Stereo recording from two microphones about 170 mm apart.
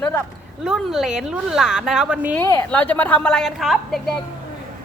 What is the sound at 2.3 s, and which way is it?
A woman's voice, 15° left (ahead or behind).